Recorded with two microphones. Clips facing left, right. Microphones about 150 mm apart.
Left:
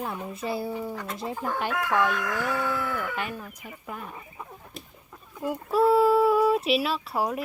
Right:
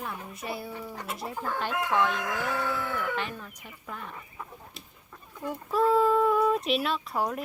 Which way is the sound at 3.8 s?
10° left (ahead or behind).